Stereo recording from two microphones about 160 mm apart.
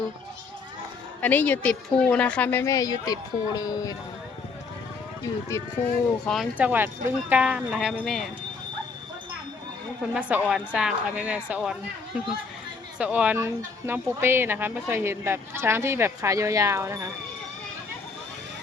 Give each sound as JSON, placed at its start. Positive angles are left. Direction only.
{"t": 1.2, "sound": "speech", "side_deg": 10}
{"t": 5.2, "sound": "speech", "side_deg": 20}
{"t": 6.2, "sound": "speech", "side_deg": 0}
{"t": 10.2, "sound": "speech", "side_deg": -10}